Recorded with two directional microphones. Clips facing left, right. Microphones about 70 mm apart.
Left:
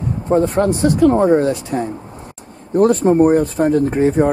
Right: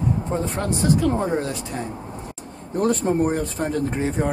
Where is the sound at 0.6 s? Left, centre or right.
Left.